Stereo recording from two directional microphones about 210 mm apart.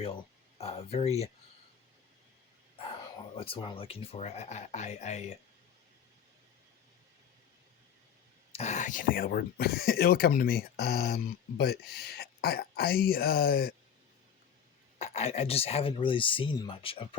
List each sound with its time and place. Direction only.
0.6 s speech: 30° left (ahead or behind)
2.7 s speech: 25° left (ahead or behind)
8.5 s speech: 35° left (ahead or behind)
14.9 s speech: 30° left (ahead or behind)